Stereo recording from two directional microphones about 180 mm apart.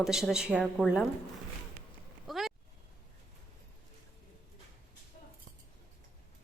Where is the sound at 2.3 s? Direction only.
Centre (ahead or behind).